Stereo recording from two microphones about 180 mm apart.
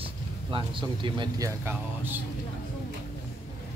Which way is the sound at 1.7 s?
10° right (ahead or behind).